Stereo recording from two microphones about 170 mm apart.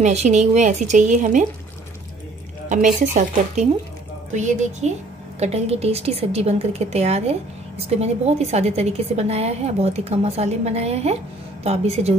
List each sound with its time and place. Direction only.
0.0 s speech: 40° right (ahead or behind)
2.7 s a woman's voice: 45° right (ahead or behind)